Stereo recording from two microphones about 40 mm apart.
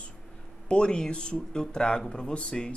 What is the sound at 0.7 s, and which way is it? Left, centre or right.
Speech, left.